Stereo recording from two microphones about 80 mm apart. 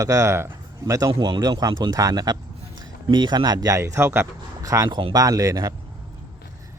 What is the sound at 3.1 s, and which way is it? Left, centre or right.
Speech, right.